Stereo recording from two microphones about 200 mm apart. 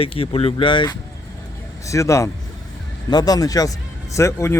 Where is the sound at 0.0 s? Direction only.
30° left (ahead or behind).